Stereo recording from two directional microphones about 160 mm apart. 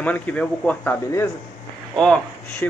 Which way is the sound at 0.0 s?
10° left (ahead or behind).